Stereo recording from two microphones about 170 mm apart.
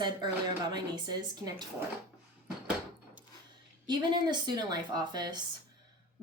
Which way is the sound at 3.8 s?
25° right (ahead or behind).